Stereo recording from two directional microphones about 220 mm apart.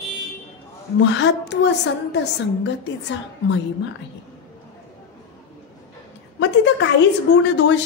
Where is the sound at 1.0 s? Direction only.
55° left (ahead or behind).